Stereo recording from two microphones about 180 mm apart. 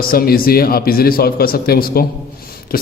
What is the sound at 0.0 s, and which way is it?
A man's voice, 55° left (ahead or behind).